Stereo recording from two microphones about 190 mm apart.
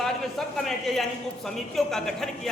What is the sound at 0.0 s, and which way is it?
A man's voice, centre (ahead or behind).